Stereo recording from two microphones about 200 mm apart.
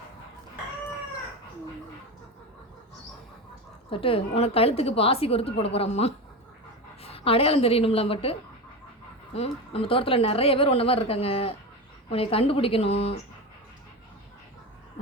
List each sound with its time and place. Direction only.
3.8 s a woman's voice: 25° left (ahead or behind)